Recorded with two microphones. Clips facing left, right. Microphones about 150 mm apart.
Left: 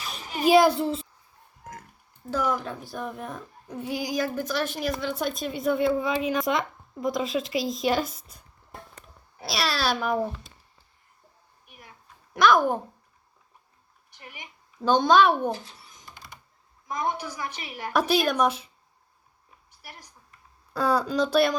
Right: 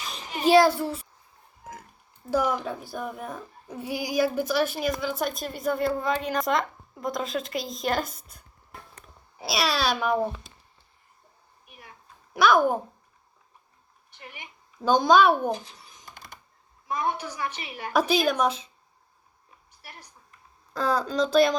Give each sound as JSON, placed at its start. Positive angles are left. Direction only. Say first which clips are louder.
{"t": 0.4, "sound": "a child's voice", "louder": "even", "side_deg": 15}
{"t": 2.3, "sound": "speech", "louder": "right 2 dB", "side_deg": -10}
{"t": 9.5, "sound": "speech", "louder": "right 1 dB", "side_deg": 0}
{"t": 12.3, "sound": "speech", "louder": "even", "side_deg": -5}
{"t": 14.1, "sound": "speech", "louder": "right 1 dB", "side_deg": 10}
{"t": 14.8, "sound": "speech", "louder": "even", "side_deg": -5}
{"t": 16.1, "sound": "typing", "louder": "right 1 dB", "side_deg": -50}
{"t": 16.9, "sound": "a woman's voice", "louder": "right 1 dB", "side_deg": 15}
{"t": 20.7, "sound": "a woman's voice", "louder": "left 1 dB", "side_deg": 5}